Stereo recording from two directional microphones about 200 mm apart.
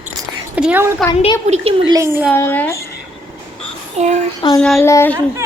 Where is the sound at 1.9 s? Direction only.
10° right (ahead or behind).